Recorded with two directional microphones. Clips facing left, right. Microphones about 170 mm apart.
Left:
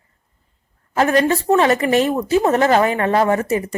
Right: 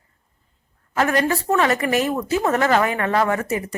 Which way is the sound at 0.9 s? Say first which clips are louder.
Left 4 dB; 30° left (ahead or behind).